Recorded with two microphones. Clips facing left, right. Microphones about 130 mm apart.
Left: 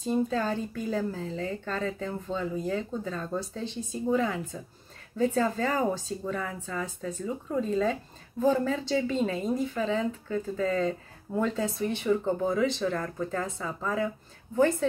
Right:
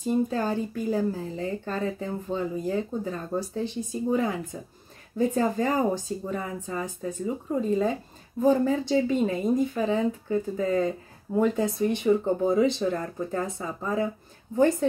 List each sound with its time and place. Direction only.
0.0 s speech: 15° right (ahead or behind)
12.1 s speech: 30° right (ahead or behind)